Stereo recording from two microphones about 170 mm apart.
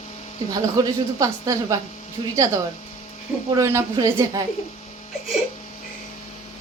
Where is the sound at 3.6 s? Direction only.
20° right (ahead or behind).